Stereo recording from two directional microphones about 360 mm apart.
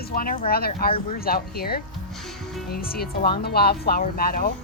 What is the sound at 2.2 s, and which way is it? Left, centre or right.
Music, centre.